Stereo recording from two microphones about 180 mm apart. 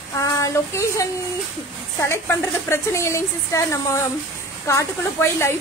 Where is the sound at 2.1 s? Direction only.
15° left (ahead or behind).